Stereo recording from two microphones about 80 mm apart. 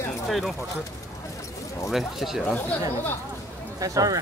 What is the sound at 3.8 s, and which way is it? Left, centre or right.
Speech, right.